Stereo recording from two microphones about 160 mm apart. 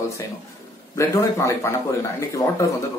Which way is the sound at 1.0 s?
20° left (ahead or behind).